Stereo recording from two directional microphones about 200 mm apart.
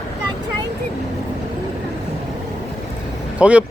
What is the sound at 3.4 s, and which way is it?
Speech, 5° right (ahead or behind).